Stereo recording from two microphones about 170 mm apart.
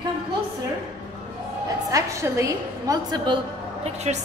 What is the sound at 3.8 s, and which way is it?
Speech, 40° right (ahead or behind).